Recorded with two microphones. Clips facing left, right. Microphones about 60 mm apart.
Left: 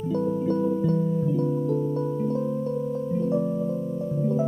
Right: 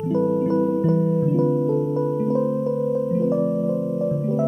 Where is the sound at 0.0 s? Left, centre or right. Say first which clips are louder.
Right 5 dB; centre.